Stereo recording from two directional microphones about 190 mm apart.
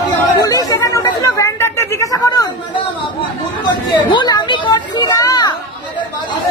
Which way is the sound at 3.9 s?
25° left (ahead or behind).